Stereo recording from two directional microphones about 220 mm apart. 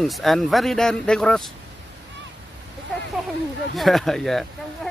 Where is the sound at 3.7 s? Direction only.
Centre (ahead or behind).